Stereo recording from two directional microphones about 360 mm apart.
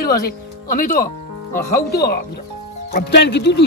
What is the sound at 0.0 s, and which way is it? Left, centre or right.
Speech, left.